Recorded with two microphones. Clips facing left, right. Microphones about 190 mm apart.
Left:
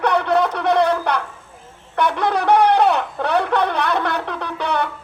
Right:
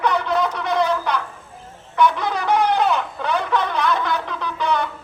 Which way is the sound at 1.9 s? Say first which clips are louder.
Even; 60° left (ahead or behind).